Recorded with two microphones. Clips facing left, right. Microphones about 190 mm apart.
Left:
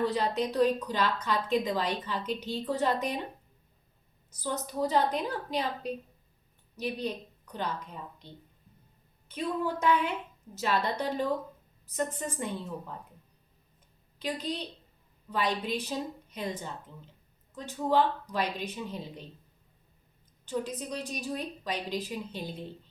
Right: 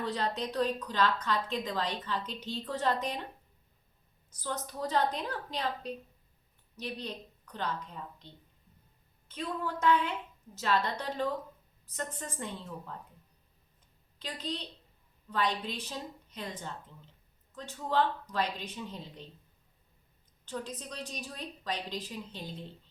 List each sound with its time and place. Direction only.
0.0 s a woman's voice: 10° left (ahead or behind)
4.3 s a woman's voice: 10° left (ahead or behind)
9.3 s a woman's voice: 10° left (ahead or behind)
14.2 s a woman's voice: 10° left (ahead or behind)
20.4 s a woman's voice: 10° left (ahead or behind)